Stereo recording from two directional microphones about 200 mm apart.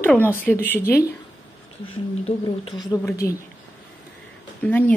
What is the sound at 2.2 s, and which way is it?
A woman's voice, 25° left (ahead or behind).